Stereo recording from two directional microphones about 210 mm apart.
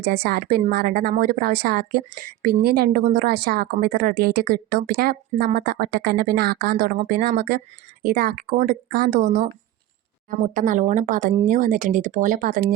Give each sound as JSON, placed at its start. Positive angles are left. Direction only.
{"t": 0.0, "sound": "speech", "side_deg": -50}